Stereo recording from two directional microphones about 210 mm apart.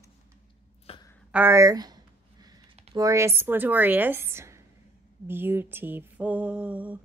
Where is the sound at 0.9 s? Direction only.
30° left (ahead or behind).